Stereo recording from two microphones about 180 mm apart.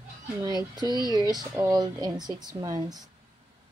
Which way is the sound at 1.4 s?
20° right (ahead or behind).